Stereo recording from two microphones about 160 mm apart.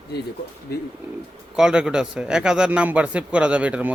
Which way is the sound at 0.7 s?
80° left.